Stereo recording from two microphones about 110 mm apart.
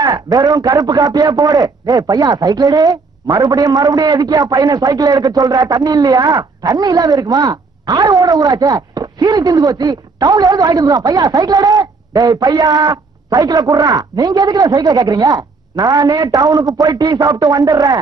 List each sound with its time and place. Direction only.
0.0 s a man's voice: 35° right (ahead or behind)